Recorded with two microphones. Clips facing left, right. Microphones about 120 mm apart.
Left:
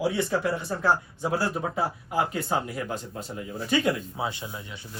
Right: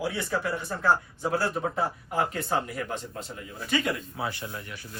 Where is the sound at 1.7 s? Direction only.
10° left (ahead or behind).